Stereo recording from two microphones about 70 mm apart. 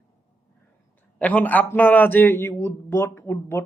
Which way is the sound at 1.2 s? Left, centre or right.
Left.